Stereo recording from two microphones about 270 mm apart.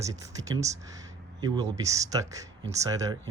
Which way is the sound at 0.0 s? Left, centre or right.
Centre.